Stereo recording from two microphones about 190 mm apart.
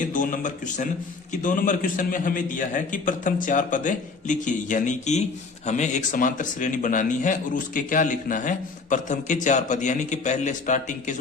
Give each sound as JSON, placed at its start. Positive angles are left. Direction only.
{"t": 0.0, "sound": "a man's voice", "side_deg": 45}